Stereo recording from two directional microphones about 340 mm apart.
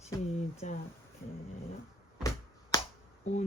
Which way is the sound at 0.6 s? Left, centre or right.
Left.